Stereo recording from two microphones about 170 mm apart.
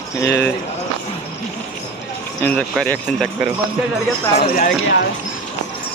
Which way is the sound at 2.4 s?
5° left (ahead or behind).